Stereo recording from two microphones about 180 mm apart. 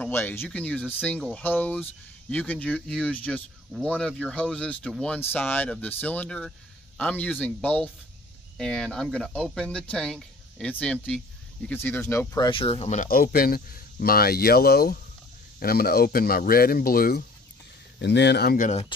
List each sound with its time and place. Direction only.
0.0 s speech: 10° left (ahead or behind)
12.4 s speech: 30° left (ahead or behind); by 17.2 s 55° left (ahead or behind)
17.9 s speech: 70° left (ahead or behind)